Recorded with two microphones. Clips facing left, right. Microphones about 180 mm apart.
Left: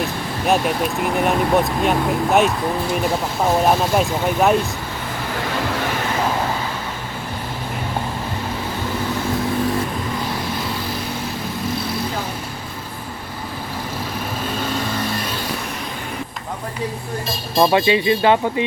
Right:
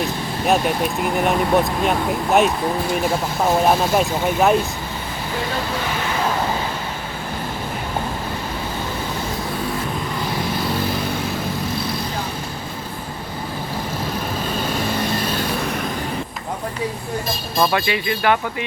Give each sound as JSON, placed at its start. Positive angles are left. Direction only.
{"t": 0.4, "sound": "speech", "side_deg": 0}
{"t": 3.7, "sound": "speech", "side_deg": 0}
{"t": 17.6, "sound": "speech", "side_deg": 20}